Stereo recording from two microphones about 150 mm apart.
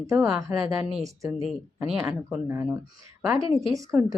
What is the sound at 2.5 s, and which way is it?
Speech, 15° right (ahead or behind).